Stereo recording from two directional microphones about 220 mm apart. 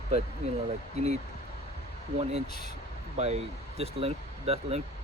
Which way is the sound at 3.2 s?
30° right (ahead or behind).